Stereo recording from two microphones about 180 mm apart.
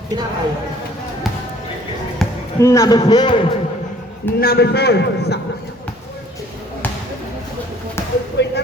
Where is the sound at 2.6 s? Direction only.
15° left (ahead or behind).